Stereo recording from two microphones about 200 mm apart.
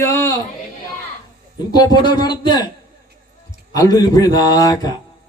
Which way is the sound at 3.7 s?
20° left (ahead or behind).